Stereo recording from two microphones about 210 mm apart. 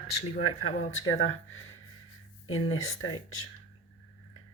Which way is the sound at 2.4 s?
85° left.